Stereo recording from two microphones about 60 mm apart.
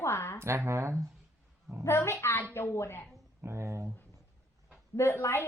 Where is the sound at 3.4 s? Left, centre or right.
Right.